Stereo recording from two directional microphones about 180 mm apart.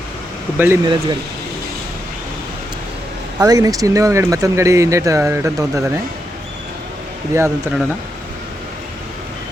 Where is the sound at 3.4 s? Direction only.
20° right (ahead or behind).